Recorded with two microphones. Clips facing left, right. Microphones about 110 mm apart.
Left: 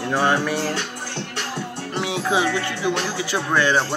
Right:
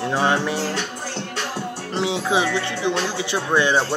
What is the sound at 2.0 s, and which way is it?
Speech, 25° right (ahead or behind).